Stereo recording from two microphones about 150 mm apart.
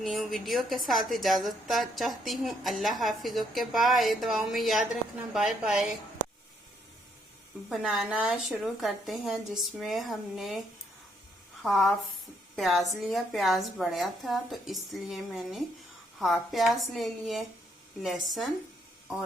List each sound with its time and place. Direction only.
0.0 s a woman's voice: centre (ahead or behind)
7.7 s a woman's voice: centre (ahead or behind)
11.6 s a woman's voice: centre (ahead or behind)